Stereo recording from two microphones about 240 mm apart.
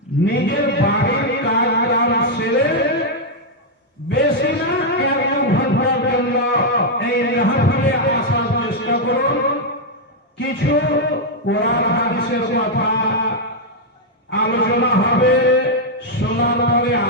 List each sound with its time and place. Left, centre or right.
0.3 s speech: left
4.1 s a sound: left
10.3 s a man's voice: left
14.3 s speech: left